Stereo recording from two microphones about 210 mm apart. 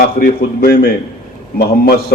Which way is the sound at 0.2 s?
45° left (ahead or behind).